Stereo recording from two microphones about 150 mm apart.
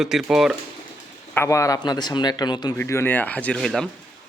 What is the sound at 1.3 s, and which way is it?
A man's voice, 15° left (ahead or behind).